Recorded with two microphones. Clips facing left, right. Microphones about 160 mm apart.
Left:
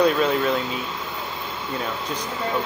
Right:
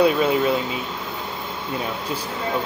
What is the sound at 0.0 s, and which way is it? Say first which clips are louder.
Speech: right 1 dB; 5° right (ahead or behind).